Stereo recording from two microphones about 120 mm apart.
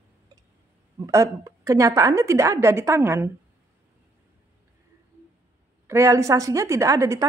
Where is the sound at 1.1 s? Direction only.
25° right (ahead or behind).